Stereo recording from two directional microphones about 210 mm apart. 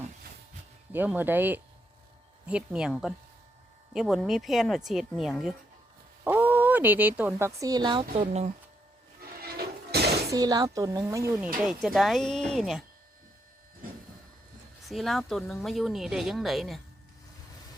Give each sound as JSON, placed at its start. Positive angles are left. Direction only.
{"t": 0.9, "sound": "speech", "side_deg": -10}
{"t": 9.2, "sound": "a sound", "side_deg": -45}
{"t": 10.3, "sound": "speech", "side_deg": -20}
{"t": 11.3, "sound": "speech", "side_deg": -5}
{"t": 14.8, "sound": "speech", "side_deg": 0}